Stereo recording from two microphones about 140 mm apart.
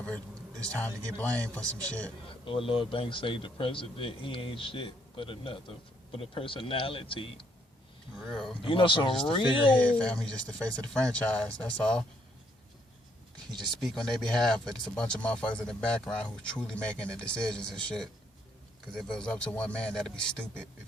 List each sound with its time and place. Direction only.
0.6 s speech: 10° left (ahead or behind)
2.4 s speech: 40° left (ahead or behind)
8.3 s speech: centre (ahead or behind)
8.6 s speech: 35° left (ahead or behind)
9.8 s speech: 10° left (ahead or behind)
13.8 s speech: 5° left (ahead or behind)